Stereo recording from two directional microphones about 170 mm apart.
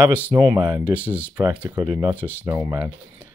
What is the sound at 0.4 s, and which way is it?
Speech, 30° right (ahead or behind).